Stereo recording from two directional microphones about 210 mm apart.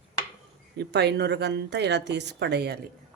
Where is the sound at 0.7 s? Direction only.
50° right (ahead or behind).